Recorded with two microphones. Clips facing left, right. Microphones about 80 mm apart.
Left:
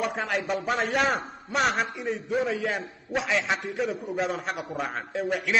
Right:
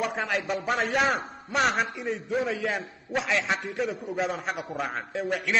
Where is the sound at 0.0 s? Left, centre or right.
Centre.